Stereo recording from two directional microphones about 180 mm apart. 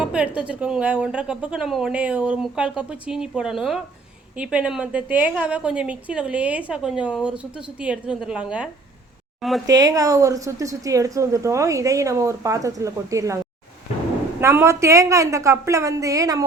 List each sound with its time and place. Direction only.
0.0 s a woman's voice: 5° right (ahead or behind)
9.6 s speech: 20° right (ahead or behind)
14.4 s speech: 15° right (ahead or behind)